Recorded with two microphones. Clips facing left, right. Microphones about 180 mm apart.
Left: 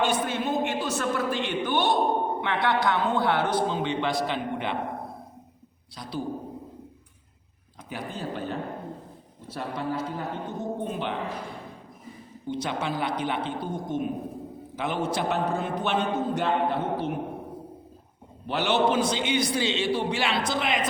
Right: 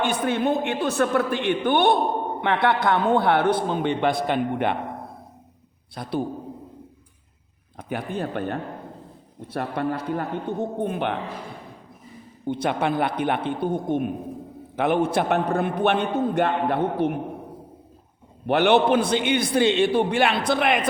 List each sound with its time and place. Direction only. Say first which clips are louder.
0.0 s a man's voice: right 3 dB; 55° right (ahead or behind)
5.9 s a man's voice: right 6 dB; 55° right (ahead or behind)
7.8 s a man's voice: right 6 dB; 60° right (ahead or behind)
12.5 s a man's voice: right 6 dB; 55° right (ahead or behind)
18.4 s a man's voice: right 6 dB; 60° right (ahead or behind)